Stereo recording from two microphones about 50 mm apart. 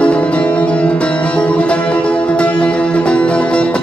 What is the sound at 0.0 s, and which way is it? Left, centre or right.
Music, left.